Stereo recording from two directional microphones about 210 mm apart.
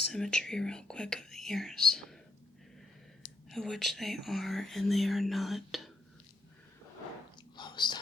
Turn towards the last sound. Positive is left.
turn(degrees=20)  # may be behind; listen again after turning